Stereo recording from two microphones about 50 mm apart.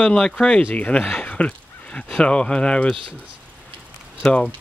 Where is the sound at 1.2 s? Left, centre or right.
Left.